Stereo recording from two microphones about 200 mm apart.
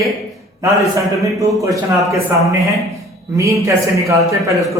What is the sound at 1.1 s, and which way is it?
Speech, centre (ahead or behind).